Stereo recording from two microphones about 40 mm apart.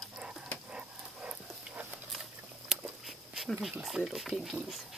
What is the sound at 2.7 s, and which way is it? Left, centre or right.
Walk, centre.